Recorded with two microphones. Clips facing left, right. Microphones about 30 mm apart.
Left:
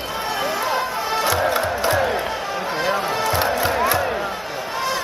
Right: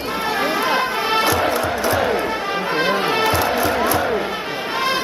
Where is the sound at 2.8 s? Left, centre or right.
Right.